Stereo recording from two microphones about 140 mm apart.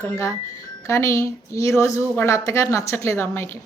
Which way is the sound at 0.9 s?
20° left (ahead or behind).